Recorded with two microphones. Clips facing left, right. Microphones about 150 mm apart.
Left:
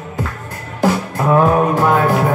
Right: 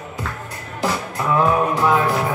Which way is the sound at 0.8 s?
45° left (ahead or behind).